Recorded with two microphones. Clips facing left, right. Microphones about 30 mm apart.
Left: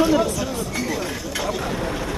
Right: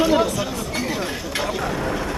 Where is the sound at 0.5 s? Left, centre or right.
Right.